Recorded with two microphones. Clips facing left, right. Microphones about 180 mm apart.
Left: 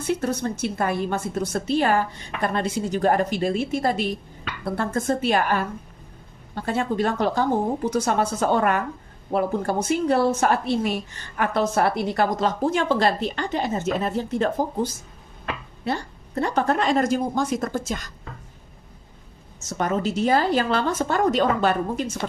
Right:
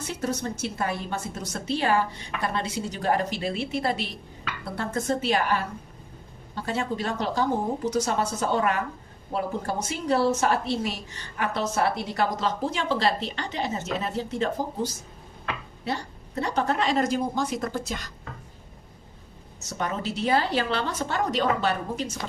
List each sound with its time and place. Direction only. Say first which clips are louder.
0.2 s a woman's voice: left 4 dB; 55° left (ahead or behind)
15.8 s a woman's voice: left 5 dB; 50° left (ahead or behind)
19.5 s a woman's voice: left 6 dB; 50° left (ahead or behind)